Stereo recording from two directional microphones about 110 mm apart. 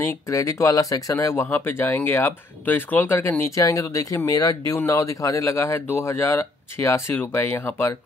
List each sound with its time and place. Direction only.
0.0 s speech: 30° left (ahead or behind)